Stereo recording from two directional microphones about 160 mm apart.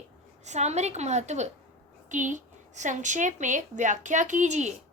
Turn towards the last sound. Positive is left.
turn(degrees=-50)  # may be behind; listen again after turning